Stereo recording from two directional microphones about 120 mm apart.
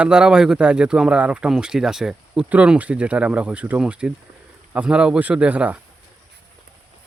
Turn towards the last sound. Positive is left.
turn(degrees=-10)  # may be behind; listen again after turning